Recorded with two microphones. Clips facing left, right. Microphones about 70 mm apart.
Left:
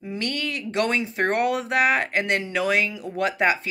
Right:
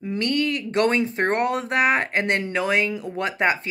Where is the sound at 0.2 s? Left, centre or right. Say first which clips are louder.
Right 6 dB; right.